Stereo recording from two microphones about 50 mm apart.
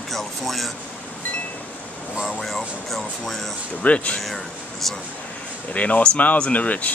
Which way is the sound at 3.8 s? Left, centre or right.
Left.